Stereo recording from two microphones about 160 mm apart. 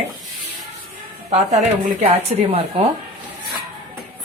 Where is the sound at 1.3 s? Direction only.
45° right (ahead or behind).